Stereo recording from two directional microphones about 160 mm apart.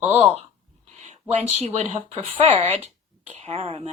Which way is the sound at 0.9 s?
45° right (ahead or behind).